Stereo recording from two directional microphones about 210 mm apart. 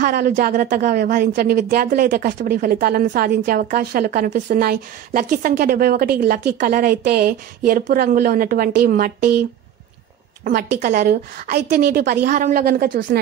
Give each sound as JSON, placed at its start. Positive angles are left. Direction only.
{"t": 0.0, "sound": "speech", "side_deg": -45}
{"t": 10.4, "sound": "speech", "side_deg": -40}